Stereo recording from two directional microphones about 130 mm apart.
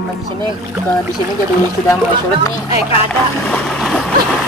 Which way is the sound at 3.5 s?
5° left (ahead or behind).